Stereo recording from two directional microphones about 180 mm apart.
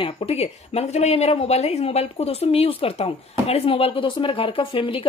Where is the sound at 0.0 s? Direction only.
35° left (ahead or behind).